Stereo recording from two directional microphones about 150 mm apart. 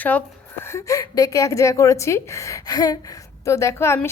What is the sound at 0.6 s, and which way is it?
A woman's voice, 20° left (ahead or behind).